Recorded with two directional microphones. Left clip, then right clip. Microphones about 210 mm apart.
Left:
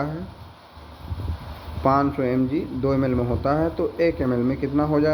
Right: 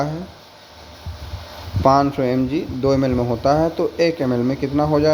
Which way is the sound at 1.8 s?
35° right (ahead or behind).